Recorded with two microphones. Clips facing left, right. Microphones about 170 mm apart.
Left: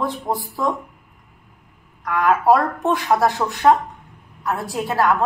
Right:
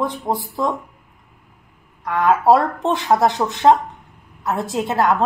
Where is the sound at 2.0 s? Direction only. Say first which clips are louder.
Right 1 dB; 25° right (ahead or behind).